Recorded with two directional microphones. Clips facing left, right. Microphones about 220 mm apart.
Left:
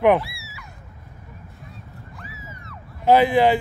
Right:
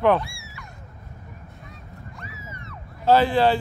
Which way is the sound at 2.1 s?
Centre (ahead or behind).